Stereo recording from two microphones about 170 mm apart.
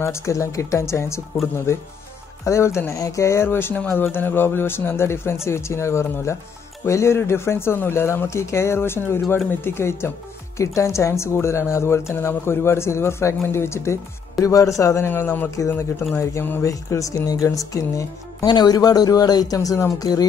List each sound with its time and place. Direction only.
0.0 s speech: 15° left (ahead or behind)